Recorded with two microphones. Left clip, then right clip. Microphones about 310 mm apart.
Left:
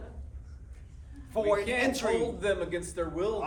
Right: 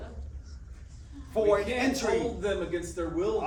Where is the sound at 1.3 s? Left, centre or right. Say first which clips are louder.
Right 2 dB; centre.